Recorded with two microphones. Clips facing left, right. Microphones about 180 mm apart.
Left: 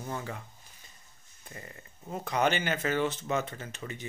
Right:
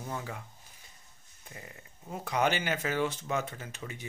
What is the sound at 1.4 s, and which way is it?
Speech, 5° right (ahead or behind).